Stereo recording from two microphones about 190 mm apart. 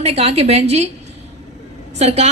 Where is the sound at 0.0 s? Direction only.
35° right (ahead or behind).